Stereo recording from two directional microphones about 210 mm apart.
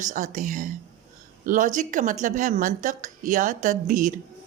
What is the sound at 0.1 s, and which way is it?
A woman's voice, 35° right (ahead or behind).